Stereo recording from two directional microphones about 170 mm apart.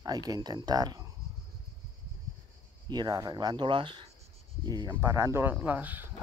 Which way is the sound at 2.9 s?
20° right (ahead or behind).